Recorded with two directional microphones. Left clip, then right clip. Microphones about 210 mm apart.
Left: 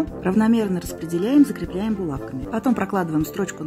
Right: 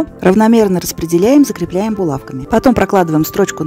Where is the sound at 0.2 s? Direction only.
45° right (ahead or behind).